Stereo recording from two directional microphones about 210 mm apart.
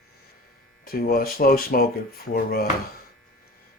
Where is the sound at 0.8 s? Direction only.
45° left (ahead or behind).